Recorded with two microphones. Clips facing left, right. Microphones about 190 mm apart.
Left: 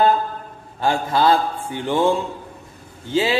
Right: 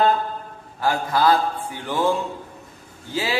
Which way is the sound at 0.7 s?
25° left (ahead or behind).